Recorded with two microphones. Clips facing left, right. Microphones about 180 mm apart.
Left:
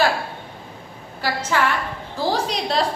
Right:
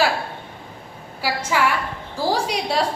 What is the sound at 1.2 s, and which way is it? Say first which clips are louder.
A woman's voice: even; 10° right (ahead or behind).